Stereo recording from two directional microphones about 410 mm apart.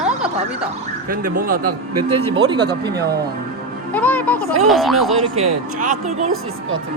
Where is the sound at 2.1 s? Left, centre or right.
Centre.